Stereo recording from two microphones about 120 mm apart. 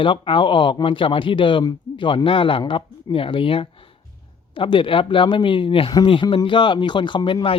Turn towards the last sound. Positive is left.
turn(degrees=35)  # may be behind; listen again after turning